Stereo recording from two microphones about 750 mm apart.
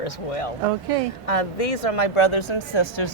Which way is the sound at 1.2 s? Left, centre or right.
Left.